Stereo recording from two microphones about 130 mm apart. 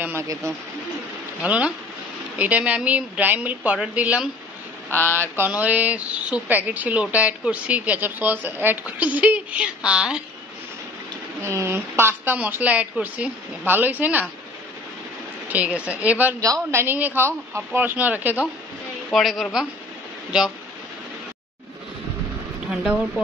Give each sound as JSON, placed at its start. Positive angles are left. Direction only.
{"t": 0.0, "sound": "speech", "side_deg": -20}
{"t": 1.4, "sound": "speech", "side_deg": -10}
{"t": 4.8, "sound": "speech", "side_deg": 15}
{"t": 5.3, "sound": "speech", "side_deg": -15}
{"t": 11.4, "sound": "speech", "side_deg": -20}
{"t": 15.4, "sound": "speech", "side_deg": -10}
{"t": 19.1, "sound": "a woman's voice", "side_deg": 0}
{"t": 22.7, "sound": "a woman's voice", "side_deg": -5}